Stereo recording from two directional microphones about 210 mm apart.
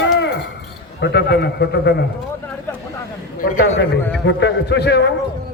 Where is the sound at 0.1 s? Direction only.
55° left (ahead or behind).